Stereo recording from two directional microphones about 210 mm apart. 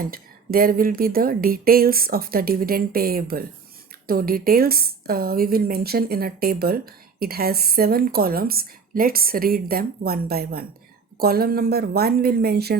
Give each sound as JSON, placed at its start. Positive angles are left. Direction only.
{"t": 0.0, "sound": "a woman's voice", "side_deg": -45}